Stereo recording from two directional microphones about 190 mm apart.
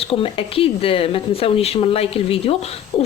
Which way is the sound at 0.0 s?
30° left (ahead or behind).